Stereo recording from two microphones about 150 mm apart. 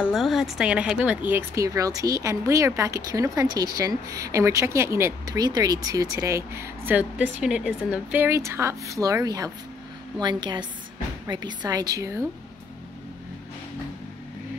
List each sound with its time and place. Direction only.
0.0 s a woman's voice: centre (ahead or behind); by 12.3 s 20° right (ahead or behind)